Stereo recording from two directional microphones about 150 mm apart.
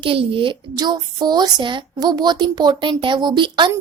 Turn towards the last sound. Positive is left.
turn(degrees=-30)  # may be behind; listen again after turning